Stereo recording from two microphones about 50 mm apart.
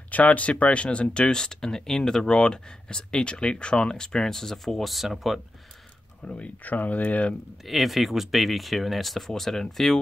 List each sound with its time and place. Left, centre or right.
0.1 s speech: left; by 5.4 s centre
6.2 s speech: left
7.6 s speech: centre